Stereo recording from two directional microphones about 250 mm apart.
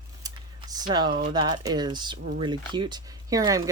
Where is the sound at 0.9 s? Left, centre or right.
Centre.